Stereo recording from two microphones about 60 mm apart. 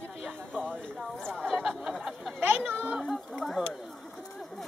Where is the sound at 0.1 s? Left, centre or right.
Centre.